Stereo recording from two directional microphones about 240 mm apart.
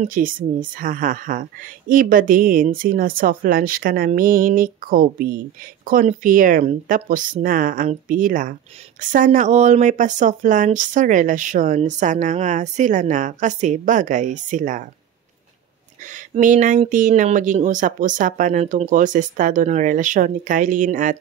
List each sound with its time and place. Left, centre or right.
0.0 s speech: right
16.1 s speech: right